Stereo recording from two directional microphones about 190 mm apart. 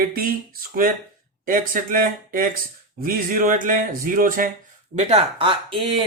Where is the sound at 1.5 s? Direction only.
45° right (ahead or behind).